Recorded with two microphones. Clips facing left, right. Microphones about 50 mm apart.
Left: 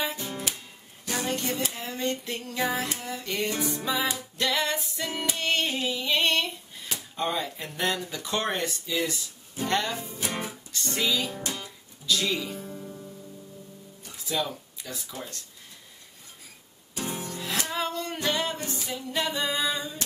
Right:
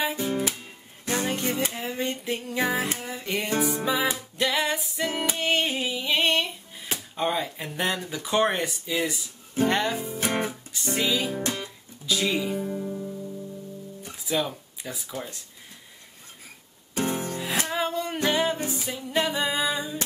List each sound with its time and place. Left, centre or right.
0.0 s music: centre
10.2 s guitar: right
10.7 s music: centre
11.4 s music: right
12.1 s music: centre
14.2 s speech: centre
16.9 s music: right
17.4 s music: centre